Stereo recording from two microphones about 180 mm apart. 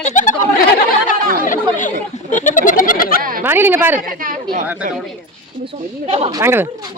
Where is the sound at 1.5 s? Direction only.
45° left (ahead or behind).